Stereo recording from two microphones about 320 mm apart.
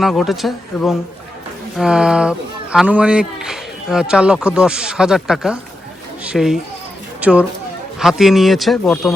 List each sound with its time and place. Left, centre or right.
0.0 s speech: centre